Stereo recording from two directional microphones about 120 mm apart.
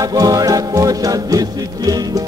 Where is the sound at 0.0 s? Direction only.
30° right (ahead or behind).